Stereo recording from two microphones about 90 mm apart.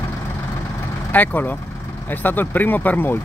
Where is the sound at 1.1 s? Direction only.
20° left (ahead or behind).